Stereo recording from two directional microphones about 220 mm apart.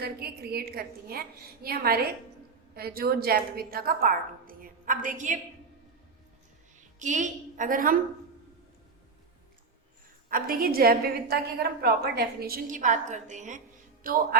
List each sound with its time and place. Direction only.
0.0 s a woman's voice: 45° right (ahead or behind)
6.7 s a woman's voice: 35° right (ahead or behind)
10.2 s a woman's voice: 40° right (ahead or behind)